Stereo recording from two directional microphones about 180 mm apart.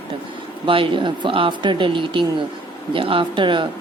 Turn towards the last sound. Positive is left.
turn(degrees=-25)  # may be behind; listen again after turning